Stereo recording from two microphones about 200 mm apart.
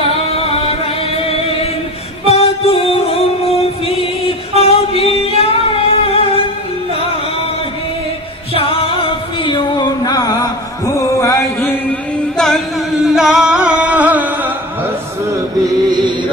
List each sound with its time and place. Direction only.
2.2 s music: 30° left (ahead or behind)
4.6 s singing: 30° left (ahead or behind)
8.5 s a sound: 25° left (ahead or behind)
12.4 s singing: centre (ahead or behind)